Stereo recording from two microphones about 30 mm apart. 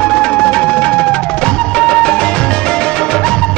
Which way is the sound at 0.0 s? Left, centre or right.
Left.